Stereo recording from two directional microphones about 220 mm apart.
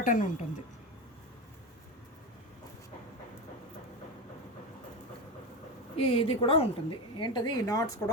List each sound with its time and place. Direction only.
0.0 s a woman's voice: 35° left (ahead or behind)
6.0 s a woman's voice: 25° left (ahead or behind)